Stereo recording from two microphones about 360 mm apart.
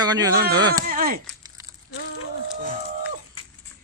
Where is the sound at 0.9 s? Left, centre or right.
Right.